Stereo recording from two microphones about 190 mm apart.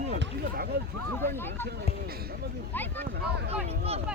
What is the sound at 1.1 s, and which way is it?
Speech, 10° left (ahead or behind).